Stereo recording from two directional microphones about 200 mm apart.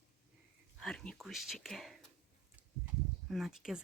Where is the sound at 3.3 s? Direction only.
Centre (ahead or behind).